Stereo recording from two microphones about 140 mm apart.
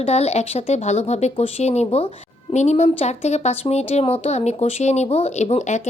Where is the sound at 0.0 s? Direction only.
50° left (ahead or behind).